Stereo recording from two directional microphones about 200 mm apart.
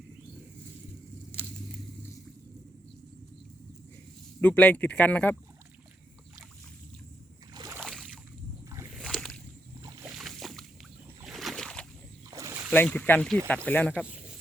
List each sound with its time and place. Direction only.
4.4 s speech: 5° left (ahead or behind)
7.5 s boat: 20° right (ahead or behind)
7.8 s boat: centre (ahead or behind)
9.8 s boat: 10° right (ahead or behind)
11.2 s a sound: centre (ahead or behind)
12.3 s boat: 15° right (ahead or behind)
12.7 s speech: 10° left (ahead or behind)
14.0 s a sound: 5° right (ahead or behind)